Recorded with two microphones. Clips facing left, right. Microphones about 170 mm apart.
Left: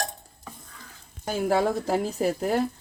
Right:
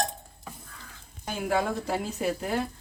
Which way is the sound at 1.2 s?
40° left (ahead or behind).